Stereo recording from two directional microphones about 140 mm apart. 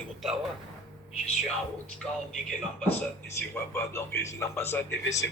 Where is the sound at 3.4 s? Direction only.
15° left (ahead or behind).